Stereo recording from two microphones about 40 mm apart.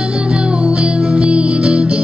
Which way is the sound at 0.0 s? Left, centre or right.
Right.